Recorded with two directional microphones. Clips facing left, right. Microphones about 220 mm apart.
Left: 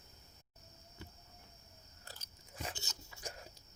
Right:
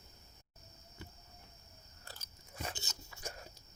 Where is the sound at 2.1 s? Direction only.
15° left (ahead or behind).